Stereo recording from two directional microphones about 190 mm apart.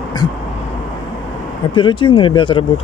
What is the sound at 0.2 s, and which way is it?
Vehicle, 20° left (ahead or behind).